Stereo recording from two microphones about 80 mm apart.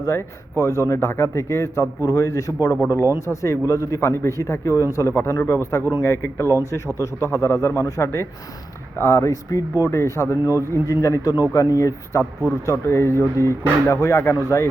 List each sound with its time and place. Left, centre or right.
0.0 s speech: left